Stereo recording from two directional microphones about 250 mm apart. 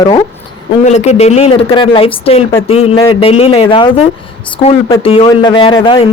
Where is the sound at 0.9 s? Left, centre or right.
Left.